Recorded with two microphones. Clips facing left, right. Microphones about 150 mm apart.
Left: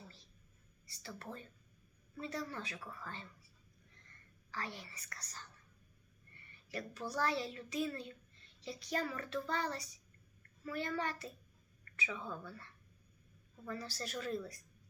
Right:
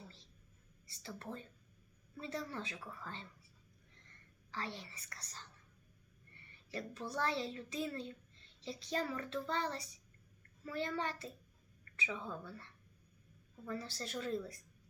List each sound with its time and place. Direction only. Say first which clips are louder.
0.9 s a child's voice: right 1 dB; 20° right (ahead or behind)
4.5 s a child's voice: right 1 dB; 25° right (ahead or behind)
6.7 s a child's voice: even; 25° right (ahead or behind)
13.7 s a child's voice: even; 25° right (ahead or behind)